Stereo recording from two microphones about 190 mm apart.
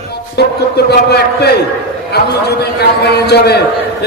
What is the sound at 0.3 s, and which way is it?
A man's voice, 60° left (ahead or behind).